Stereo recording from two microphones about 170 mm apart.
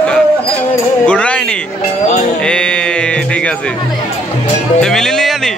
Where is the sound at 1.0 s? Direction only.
5° left (ahead or behind).